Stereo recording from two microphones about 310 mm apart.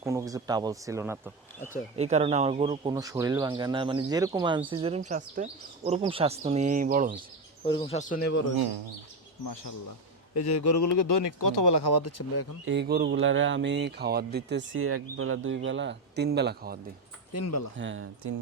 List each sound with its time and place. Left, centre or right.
0.0 s speech: centre
2.0 s speech: right
7.6 s speech: centre; by 8.4 s left
9.4 s speech: left
10.4 s speech: left
11.9 s speech: left
12.6 s speech: right
17.3 s speech: left
17.7 s speech: right